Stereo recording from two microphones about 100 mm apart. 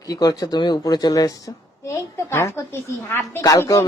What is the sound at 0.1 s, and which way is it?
A woman's voice, 40° left (ahead or behind).